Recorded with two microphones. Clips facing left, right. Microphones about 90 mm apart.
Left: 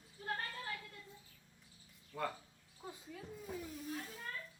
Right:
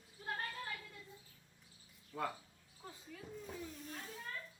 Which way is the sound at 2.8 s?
5° left (ahead or behind).